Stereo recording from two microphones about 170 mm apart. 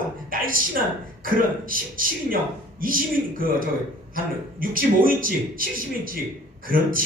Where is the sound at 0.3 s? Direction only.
55° right (ahead or behind).